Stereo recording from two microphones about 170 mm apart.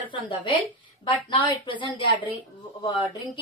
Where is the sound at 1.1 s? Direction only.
30° left (ahead or behind).